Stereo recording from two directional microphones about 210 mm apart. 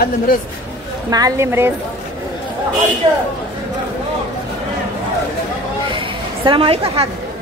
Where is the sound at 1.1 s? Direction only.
15° right (ahead or behind).